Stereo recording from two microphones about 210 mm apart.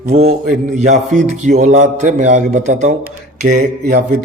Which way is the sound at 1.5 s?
35° right (ahead or behind).